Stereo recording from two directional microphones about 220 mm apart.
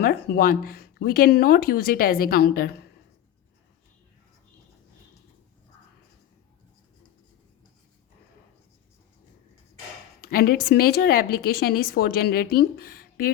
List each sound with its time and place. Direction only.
0.0 s a woman's voice: 40° left (ahead or behind)
10.2 s a woman's voice: 45° left (ahead or behind)